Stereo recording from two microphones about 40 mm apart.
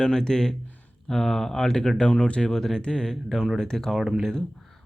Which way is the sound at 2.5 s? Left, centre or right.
Centre.